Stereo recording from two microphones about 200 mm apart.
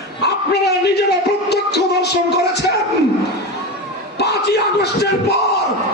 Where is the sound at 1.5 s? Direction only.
55° left (ahead or behind).